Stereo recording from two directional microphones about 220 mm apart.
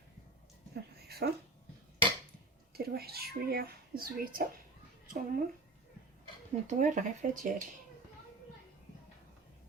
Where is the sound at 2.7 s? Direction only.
45° right (ahead or behind).